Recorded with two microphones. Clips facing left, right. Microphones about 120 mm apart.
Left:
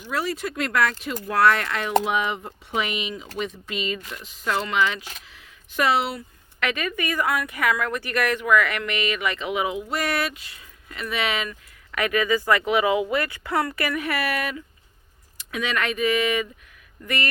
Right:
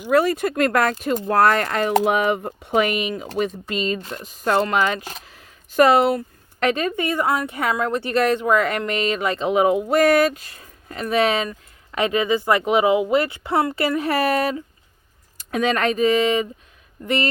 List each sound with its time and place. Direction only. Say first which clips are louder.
0.0 s speech: right 9 dB; 55° right (ahead or behind)
6.7 s speech: right 6 dB; 30° right (ahead or behind)